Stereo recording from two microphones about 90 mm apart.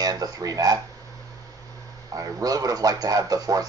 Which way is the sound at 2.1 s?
45° right (ahead or behind).